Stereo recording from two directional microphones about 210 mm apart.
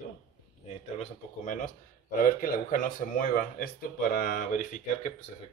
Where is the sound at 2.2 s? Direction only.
40° left (ahead or behind).